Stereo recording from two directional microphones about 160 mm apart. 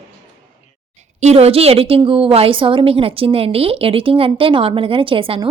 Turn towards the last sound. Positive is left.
turn(degrees=-35)  # may be behind; listen again after turning